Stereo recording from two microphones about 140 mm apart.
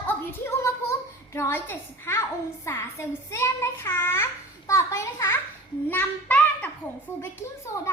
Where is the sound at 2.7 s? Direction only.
20° left (ahead or behind).